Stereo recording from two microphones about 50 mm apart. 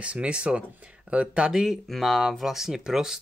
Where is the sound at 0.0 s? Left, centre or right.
Right.